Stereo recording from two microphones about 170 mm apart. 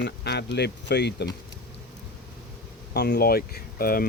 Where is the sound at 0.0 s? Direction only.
80° left.